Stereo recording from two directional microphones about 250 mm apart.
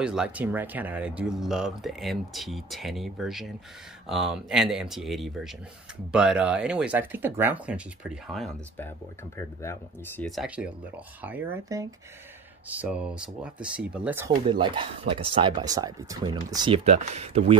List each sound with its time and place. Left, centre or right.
0.0 s speech: centre; by 17.6 s right